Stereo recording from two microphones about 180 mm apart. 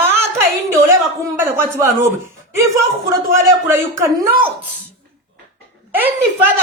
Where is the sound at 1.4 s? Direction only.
15° right (ahead or behind).